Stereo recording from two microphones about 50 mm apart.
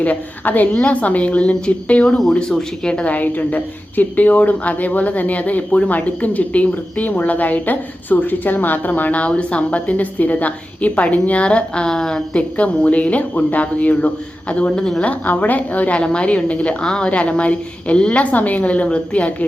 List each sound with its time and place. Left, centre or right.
0.0 s a woman's voice: left
2.0 s speech: centre
3.0 s a woman's voice: left; by 12.4 s centre
12.4 s speech: left
14.8 s speech: centre
15.0 s speech: left
16.8 s speech: centre
18.2 s speech: left